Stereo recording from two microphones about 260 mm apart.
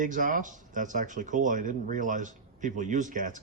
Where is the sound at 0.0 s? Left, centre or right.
Right.